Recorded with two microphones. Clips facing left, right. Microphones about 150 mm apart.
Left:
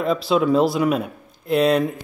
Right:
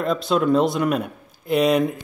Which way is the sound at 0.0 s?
Centre (ahead or behind).